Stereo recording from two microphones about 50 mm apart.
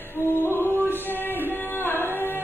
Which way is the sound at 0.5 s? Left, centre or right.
Left.